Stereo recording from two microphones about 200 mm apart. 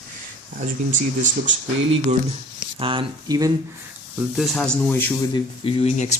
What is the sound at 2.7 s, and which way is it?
Speech, 25° right (ahead or behind).